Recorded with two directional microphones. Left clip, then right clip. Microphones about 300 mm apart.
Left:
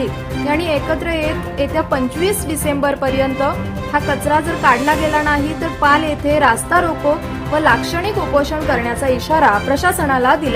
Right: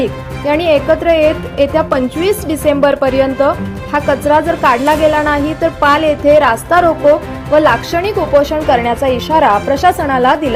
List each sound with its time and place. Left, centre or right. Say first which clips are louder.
0.0 s speech: right 4 dB; centre